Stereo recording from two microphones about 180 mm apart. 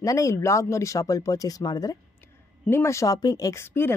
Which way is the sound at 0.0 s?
15° left (ahead or behind).